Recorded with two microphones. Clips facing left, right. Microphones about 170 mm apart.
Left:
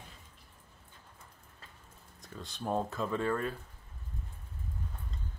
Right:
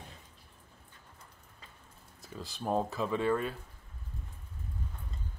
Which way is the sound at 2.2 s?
5° right (ahead or behind).